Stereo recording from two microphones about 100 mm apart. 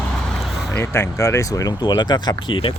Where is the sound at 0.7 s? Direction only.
25° left (ahead or behind).